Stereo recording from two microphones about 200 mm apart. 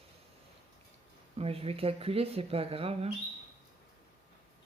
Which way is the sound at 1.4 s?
30° right (ahead or behind).